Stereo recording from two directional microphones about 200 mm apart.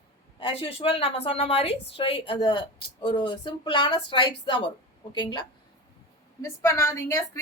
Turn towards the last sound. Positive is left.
turn(degrees=15)  # may be behind; listen again after turning